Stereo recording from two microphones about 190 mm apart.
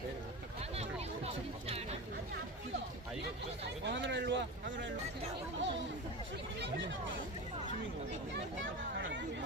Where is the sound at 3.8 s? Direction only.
70° right (ahead or behind).